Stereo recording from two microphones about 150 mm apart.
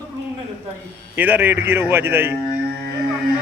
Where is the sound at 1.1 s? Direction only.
15° right (ahead or behind).